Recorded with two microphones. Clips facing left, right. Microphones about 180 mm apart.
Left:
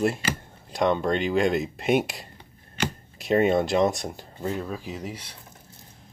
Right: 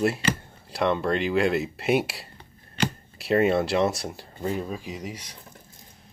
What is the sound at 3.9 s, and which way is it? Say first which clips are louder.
Speech: left 1 dB; 15° left (ahead or behind).